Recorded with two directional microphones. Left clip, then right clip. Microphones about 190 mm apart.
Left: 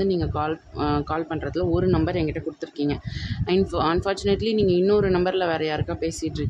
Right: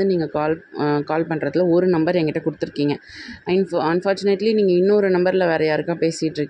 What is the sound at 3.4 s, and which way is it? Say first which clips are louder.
A man's voice: right 3 dB; 10° right (ahead or behind).